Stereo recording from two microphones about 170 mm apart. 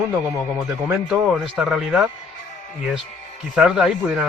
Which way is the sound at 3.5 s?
5° right (ahead or behind).